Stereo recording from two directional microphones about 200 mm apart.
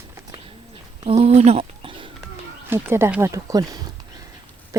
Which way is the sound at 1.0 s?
30° right (ahead or behind).